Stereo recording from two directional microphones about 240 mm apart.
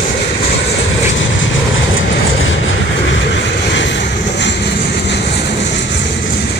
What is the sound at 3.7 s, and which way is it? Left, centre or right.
Vehicle, left.